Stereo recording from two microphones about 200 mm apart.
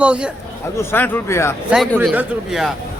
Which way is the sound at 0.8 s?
10° left (ahead or behind).